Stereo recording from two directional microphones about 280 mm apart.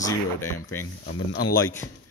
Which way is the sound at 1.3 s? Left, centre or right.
Left.